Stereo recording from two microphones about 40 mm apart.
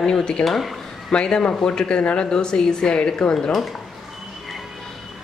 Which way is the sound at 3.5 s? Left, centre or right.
Centre.